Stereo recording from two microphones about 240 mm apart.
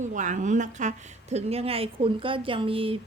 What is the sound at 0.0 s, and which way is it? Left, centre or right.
A woman's voice, right.